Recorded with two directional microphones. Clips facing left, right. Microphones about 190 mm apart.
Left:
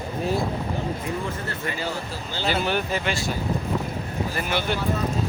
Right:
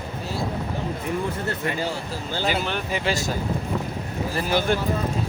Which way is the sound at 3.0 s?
40° right (ahead or behind).